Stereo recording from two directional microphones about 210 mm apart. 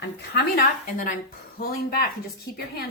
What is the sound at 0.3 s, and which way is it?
A woman's voice, 45° left (ahead or behind).